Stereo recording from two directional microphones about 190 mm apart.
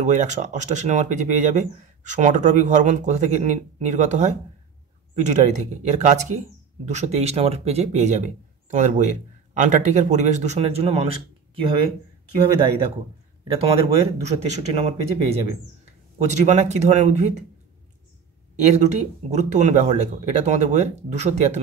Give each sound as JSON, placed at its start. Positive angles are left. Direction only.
{"t": 0.0, "sound": "a man's voice", "side_deg": -40}
{"t": 13.5, "sound": "speech", "side_deg": -30}
{"t": 18.7, "sound": "speech", "side_deg": -35}